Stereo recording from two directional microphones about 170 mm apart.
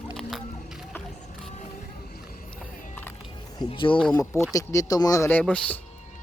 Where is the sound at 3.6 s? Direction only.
30° left (ahead or behind).